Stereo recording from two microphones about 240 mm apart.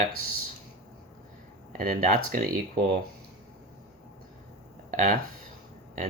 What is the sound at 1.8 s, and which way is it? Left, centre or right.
Speech, right.